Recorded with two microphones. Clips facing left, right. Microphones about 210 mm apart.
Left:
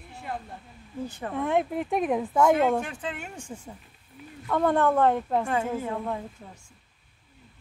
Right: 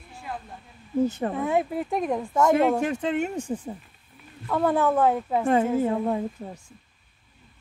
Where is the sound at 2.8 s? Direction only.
40° right (ahead or behind).